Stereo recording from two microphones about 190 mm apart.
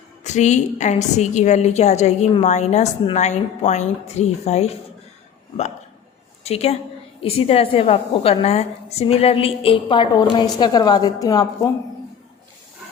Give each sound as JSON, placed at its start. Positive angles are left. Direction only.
{"t": 0.3, "sound": "a woman's voice", "side_deg": 40}
{"t": 6.4, "sound": "a woman's voice", "side_deg": 35}